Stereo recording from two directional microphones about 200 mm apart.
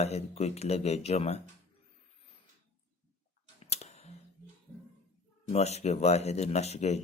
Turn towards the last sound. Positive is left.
turn(degrees=35)  # may be behind; listen again after turning